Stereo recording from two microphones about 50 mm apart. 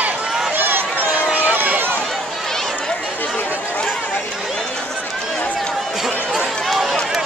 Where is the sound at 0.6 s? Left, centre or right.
Right.